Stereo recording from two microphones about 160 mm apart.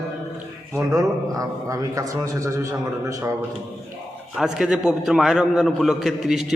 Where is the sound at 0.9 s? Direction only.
20° right (ahead or behind).